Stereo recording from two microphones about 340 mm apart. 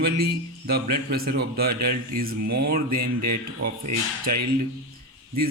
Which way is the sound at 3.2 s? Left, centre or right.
Right.